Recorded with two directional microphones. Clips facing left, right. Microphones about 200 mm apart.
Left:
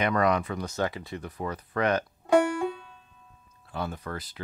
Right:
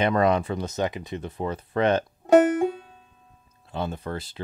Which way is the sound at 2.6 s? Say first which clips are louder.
Right 5 dB; 40° right (ahead or behind).